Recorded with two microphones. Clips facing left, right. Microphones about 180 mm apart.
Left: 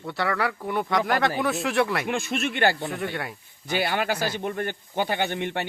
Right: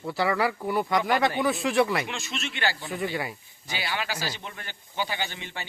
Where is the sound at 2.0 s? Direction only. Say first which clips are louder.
Left 8 dB; 55° left (ahead or behind).